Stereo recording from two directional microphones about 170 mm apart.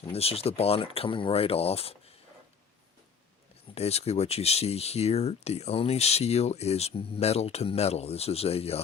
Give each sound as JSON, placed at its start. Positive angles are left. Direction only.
{"t": 0.1, "sound": "speech", "side_deg": 35}
{"t": 3.8, "sound": "speech", "side_deg": 40}